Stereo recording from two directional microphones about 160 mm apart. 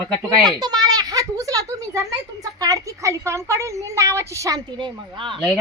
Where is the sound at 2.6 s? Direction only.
20° right (ahead or behind).